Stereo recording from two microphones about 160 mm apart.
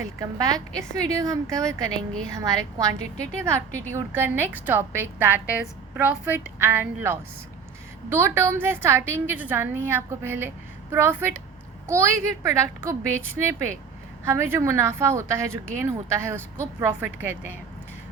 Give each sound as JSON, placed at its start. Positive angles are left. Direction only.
{"t": 0.2, "sound": "a woman's voice", "side_deg": -20}
{"t": 3.9, "sound": "a woman's voice", "side_deg": -15}